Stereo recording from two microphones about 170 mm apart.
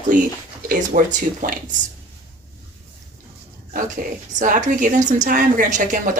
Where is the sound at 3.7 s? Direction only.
50° right (ahead or behind).